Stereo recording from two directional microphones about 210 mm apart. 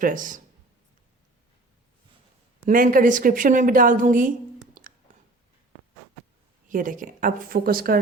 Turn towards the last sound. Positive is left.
turn(degrees=-45)  # may be behind; listen again after turning